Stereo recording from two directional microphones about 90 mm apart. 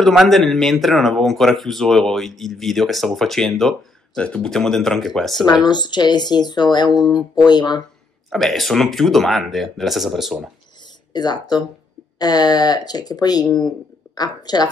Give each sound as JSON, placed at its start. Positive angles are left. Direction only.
{"t": 0.0, "sound": "speech", "side_deg": 0}
{"t": 5.4, "sound": "speech", "side_deg": 50}
{"t": 8.3, "sound": "speech", "side_deg": 0}
{"t": 11.1, "sound": "speech", "side_deg": 50}